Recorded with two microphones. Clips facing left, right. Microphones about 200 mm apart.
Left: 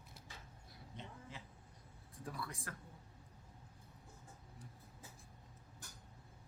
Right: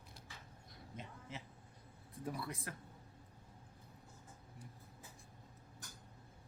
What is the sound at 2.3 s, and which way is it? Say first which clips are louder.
Speech: right 4 dB; 20° right (ahead or behind).